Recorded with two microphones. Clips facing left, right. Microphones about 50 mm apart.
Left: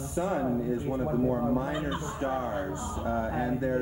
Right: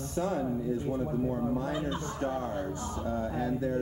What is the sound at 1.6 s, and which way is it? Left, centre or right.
Speech, left.